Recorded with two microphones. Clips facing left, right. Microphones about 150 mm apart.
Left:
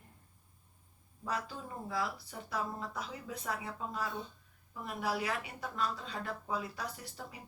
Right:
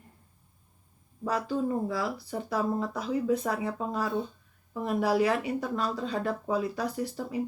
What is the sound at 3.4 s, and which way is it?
Speech, 65° right (ahead or behind).